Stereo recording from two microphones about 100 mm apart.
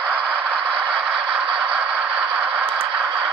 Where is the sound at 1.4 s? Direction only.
70° right (ahead or behind).